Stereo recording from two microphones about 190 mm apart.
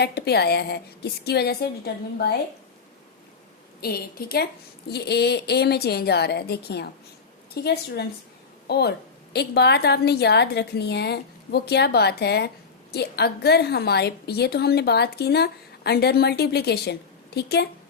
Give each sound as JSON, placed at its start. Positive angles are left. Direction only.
{"t": 0.0, "sound": "a woman's voice", "side_deg": 60}
{"t": 3.8, "sound": "a woman's voice", "side_deg": 55}